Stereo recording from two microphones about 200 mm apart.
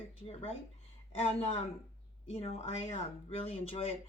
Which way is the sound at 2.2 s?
30° left (ahead or behind).